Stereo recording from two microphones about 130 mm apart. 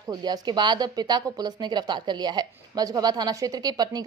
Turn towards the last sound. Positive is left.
turn(degrees=-30)  # may be behind; listen again after turning